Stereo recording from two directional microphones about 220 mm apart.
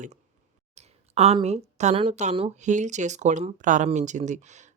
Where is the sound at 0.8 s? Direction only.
30° right (ahead or behind).